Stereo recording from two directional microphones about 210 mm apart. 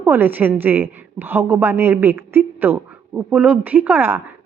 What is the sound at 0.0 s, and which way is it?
A woman's voice, 10° right (ahead or behind).